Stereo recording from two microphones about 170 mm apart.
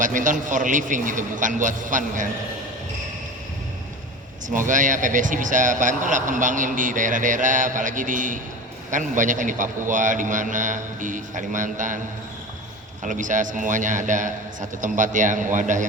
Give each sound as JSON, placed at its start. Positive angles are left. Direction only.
{"t": 0.0, "sound": "speech", "side_deg": -50}
{"t": 4.4, "sound": "speech", "side_deg": -50}
{"t": 13.1, "sound": "speech", "side_deg": -50}